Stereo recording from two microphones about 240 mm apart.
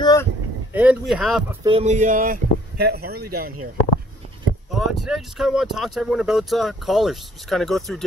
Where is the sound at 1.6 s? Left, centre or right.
Right.